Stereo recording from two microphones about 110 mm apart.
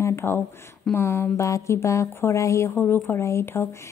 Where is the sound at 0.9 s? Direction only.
20° left (ahead or behind).